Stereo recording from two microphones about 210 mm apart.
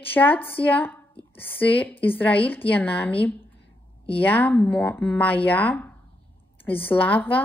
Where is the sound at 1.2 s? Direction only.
25° left (ahead or behind).